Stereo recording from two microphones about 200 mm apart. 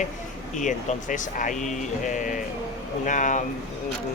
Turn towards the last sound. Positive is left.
turn(degrees=40)  # may be behind; listen again after turning